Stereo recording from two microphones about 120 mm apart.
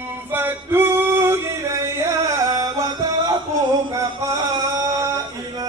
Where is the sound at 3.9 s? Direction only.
30° right (ahead or behind).